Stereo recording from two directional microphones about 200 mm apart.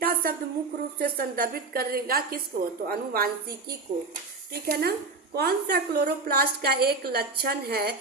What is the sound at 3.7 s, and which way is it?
A woman's voice, 50° right (ahead or behind).